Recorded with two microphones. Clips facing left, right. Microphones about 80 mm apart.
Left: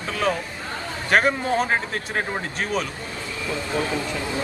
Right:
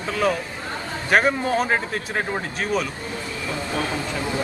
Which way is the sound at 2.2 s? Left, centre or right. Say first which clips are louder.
Even; centre.